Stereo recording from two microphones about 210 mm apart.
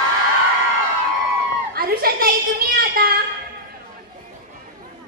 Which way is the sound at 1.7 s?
45° right (ahead or behind).